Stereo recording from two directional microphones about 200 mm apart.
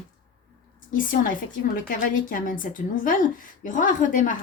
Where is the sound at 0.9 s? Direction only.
45° left (ahead or behind).